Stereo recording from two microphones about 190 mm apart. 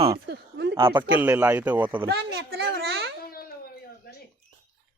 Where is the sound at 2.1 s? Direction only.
55° right (ahead or behind).